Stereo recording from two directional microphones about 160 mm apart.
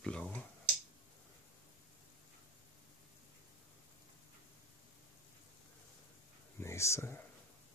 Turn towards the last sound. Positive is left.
turn(degrees=15)  # may be behind; listen again after turning